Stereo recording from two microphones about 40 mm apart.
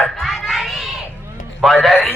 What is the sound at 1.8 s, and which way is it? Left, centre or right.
Speech, centre.